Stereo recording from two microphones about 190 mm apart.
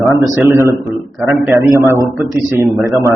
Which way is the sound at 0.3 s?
10° right (ahead or behind).